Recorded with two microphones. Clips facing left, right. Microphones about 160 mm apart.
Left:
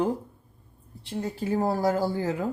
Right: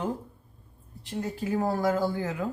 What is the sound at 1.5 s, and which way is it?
Speech, 30° left (ahead or behind).